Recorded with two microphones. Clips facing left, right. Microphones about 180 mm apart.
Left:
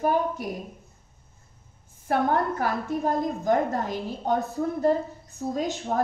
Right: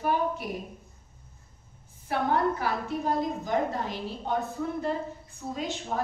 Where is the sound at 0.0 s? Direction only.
45° left (ahead or behind).